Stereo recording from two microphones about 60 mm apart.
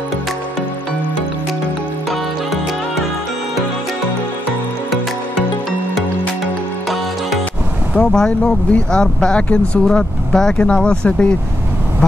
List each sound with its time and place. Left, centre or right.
7.9 s speech: centre